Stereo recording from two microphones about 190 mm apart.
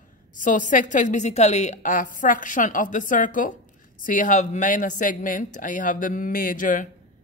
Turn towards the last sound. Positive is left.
turn(degrees=45)  # may be behind; listen again after turning